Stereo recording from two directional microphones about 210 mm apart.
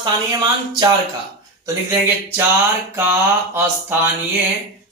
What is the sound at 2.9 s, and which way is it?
Mantra, 10° right (ahead or behind).